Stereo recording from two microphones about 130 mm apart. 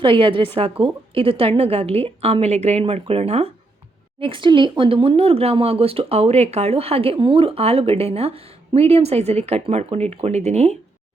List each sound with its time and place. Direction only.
0.0 s speech: 40° right (ahead or behind)
4.2 s speech: 40° right (ahead or behind); by 10.8 s 55° right (ahead or behind)